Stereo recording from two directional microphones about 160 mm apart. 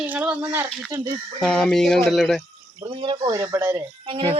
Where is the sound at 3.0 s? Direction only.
30° right (ahead or behind).